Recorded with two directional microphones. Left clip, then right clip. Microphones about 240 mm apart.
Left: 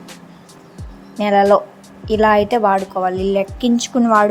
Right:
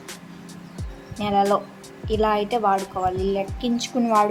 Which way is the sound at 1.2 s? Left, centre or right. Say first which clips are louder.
Left 8 dB; left.